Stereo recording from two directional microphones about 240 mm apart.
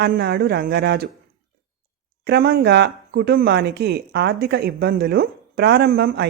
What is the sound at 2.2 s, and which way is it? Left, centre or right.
Speech, right.